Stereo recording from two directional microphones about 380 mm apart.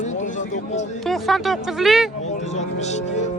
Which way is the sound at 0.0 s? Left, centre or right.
Centre.